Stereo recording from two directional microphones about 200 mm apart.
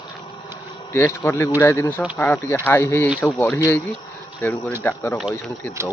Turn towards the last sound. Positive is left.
turn(degrees=10)  # may be behind; listen again after turning